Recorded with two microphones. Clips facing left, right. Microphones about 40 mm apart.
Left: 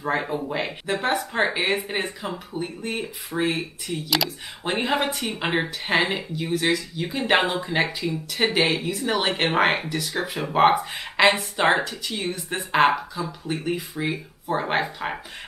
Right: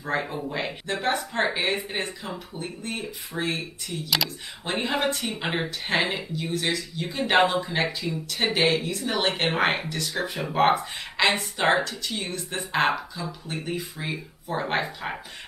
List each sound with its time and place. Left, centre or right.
0.0 s speech: centre